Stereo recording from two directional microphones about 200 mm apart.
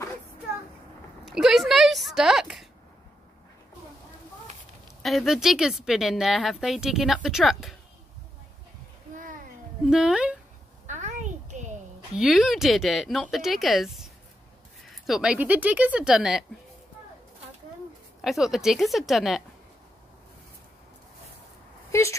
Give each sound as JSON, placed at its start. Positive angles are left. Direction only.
{"t": 1.2, "sound": "speech", "side_deg": 0}
{"t": 5.0, "sound": "speech", "side_deg": 0}
{"t": 9.1, "sound": "a sound", "side_deg": -40}
{"t": 9.8, "sound": "speech", "side_deg": -5}
{"t": 10.9, "sound": "a sound", "side_deg": -35}
{"t": 12.2, "sound": "speech", "side_deg": 0}
{"t": 15.0, "sound": "speech", "side_deg": -5}
{"t": 18.2, "sound": "speech", "side_deg": 0}